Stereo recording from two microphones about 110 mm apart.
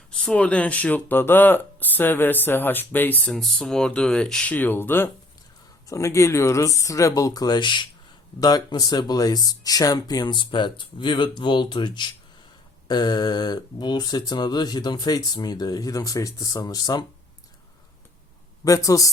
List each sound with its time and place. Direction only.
0.1 s speech: 10° left (ahead or behind)
4.5 s speech: 20° left (ahead or behind); by 17.1 s 35° left (ahead or behind)
18.6 s speech: 30° left (ahead or behind)